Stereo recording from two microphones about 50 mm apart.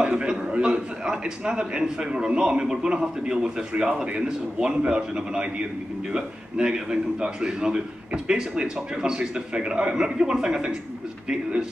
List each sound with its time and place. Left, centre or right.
0.3 s a man's voice: centre